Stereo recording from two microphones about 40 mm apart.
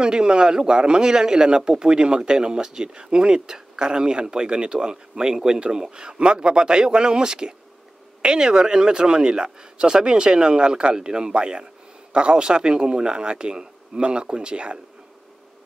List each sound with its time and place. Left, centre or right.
0.0 s a man's voice: right